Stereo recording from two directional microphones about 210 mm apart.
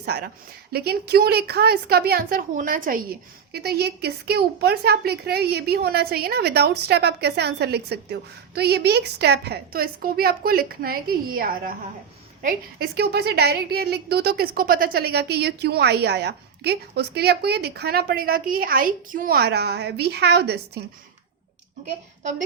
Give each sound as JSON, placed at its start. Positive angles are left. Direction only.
{"t": 0.0, "sound": "a woman's voice", "side_deg": -50}